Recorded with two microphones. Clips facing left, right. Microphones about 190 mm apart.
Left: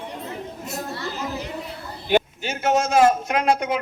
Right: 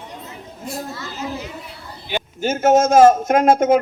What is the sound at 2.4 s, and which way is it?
A woman's voice, 45° right (ahead or behind).